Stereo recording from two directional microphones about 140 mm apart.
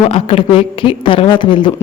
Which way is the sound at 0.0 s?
45° left (ahead or behind).